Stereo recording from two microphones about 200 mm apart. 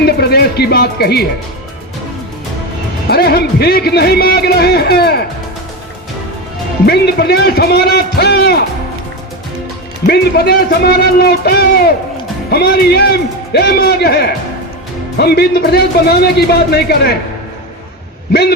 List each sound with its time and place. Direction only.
0.0 s speech: 55° left (ahead or behind)
3.1 s speech: 50° left (ahead or behind)
6.8 s speech: 55° left (ahead or behind)
10.1 s speech: 50° left (ahead or behind)